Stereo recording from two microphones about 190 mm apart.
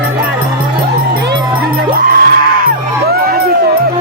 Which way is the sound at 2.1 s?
50° right (ahead or behind).